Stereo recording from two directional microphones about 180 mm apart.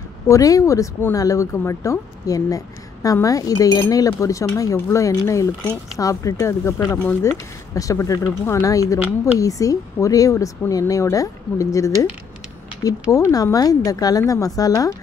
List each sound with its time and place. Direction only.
0.3 s speech: 20° left (ahead or behind)
13.1 s speech: 20° left (ahead or behind)